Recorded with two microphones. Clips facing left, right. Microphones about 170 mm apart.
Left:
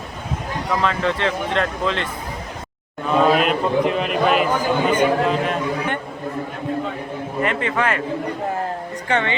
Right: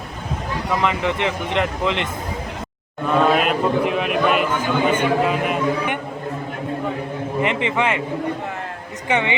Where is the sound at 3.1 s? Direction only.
Centre (ahead or behind).